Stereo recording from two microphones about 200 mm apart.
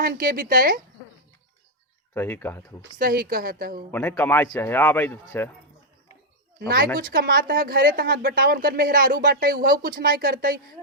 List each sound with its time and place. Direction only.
0.0 s a woman's voice: 45° right (ahead or behind)
2.1 s speech: 10° left (ahead or behind)
3.0 s a woman's voice: 45° right (ahead or behind)
3.9 s speech: 10° left (ahead or behind)
6.6 s a woman's voice: 50° right (ahead or behind)